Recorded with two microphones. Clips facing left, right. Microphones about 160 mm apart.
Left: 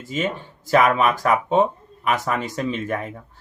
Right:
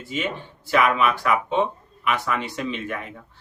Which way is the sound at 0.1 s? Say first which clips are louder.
Left 3 dB; 40° left (ahead or behind).